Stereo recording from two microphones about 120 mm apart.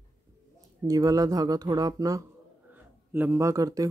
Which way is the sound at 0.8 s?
30° right (ahead or behind).